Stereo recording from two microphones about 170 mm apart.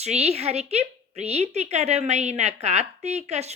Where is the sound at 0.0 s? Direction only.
40° right (ahead or behind).